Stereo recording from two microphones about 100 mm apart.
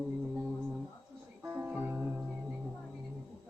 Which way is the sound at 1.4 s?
25° right (ahead or behind).